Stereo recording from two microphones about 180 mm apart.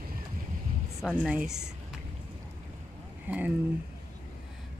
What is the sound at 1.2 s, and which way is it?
Speech, 5° right (ahead or behind).